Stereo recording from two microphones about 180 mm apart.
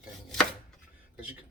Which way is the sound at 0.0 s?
5° left (ahead or behind).